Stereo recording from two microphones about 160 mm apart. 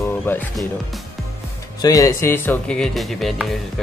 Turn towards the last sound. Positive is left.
turn(degrees=0)  # may be behind; listen again after turning